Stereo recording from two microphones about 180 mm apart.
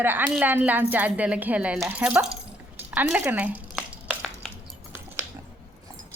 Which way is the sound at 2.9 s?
10° right (ahead or behind).